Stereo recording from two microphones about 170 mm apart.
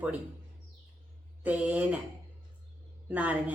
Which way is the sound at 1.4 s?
10° right (ahead or behind).